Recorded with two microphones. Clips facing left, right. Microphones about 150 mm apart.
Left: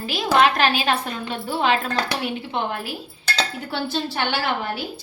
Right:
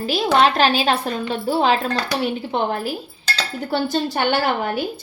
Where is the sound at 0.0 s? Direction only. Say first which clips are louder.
Right 2 dB; 35° right (ahead or behind).